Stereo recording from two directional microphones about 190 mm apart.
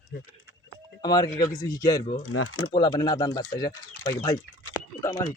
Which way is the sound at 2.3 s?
90° left.